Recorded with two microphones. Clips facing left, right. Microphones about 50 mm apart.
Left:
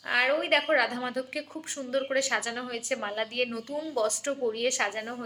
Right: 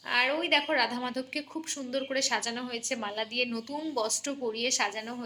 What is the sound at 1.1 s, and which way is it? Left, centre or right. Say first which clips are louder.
A woman's voice: left 1 dB; centre.